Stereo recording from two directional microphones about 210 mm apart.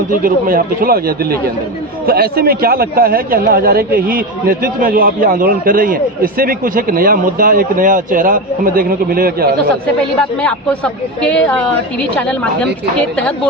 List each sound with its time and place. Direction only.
0.1 s a man's voice: 40° right (ahead or behind)
10.4 s speech: 5° left (ahead or behind)
13.1 s speech: 5° left (ahead or behind)